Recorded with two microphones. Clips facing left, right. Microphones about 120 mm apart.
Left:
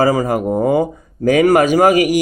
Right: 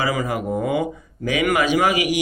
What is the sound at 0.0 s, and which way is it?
Speech, 40° left (ahead or behind).